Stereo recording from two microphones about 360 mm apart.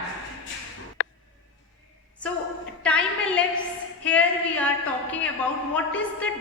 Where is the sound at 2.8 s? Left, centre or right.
Centre.